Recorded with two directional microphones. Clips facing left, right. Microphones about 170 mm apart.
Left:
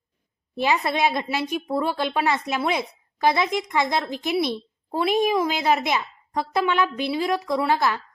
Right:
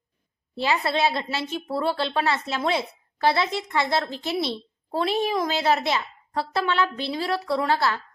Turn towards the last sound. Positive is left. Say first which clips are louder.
# left 1 dB
turn(degrees=15)  # may be behind; listen again after turning